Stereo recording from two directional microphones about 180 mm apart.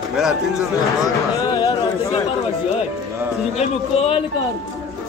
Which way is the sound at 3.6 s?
35° left (ahead or behind).